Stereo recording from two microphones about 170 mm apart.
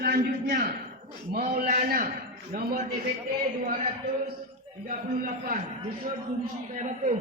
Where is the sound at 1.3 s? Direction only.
50° right (ahead or behind).